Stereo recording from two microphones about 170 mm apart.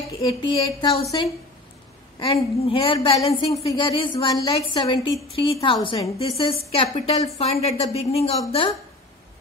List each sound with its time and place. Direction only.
0.3 s a woman's voice: 30° left (ahead or behind)
2.1 s a woman's voice: 30° left (ahead or behind)